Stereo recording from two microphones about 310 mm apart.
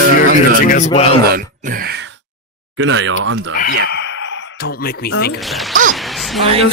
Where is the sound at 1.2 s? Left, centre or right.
Right.